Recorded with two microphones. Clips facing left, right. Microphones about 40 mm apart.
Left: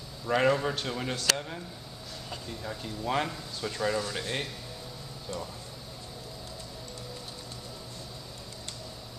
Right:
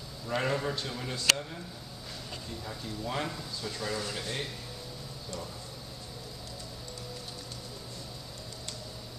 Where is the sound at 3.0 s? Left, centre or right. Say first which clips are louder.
Left 5 dB; left.